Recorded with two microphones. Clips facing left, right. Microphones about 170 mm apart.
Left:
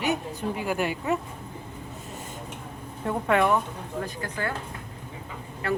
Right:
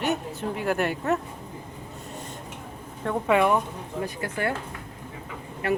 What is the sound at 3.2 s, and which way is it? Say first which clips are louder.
Speech: right 1 dB; 10° right (ahead or behind).